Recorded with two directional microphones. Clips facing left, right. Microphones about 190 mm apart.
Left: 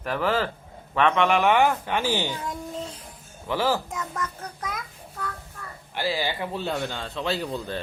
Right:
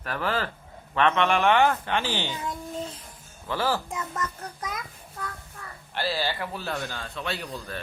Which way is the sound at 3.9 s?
5° right (ahead or behind).